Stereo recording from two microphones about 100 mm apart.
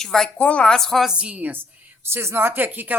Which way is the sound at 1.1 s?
15° right (ahead or behind).